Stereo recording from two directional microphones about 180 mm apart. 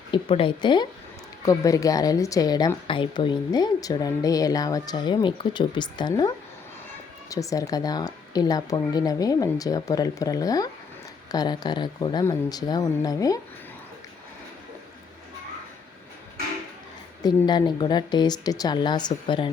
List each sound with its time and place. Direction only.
0.1 s a woman's voice: 30° left (ahead or behind)
17.2 s a woman's voice: 25° left (ahead or behind)